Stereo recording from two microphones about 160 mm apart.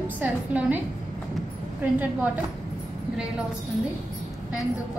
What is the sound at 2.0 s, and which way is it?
Speech, 10° right (ahead or behind).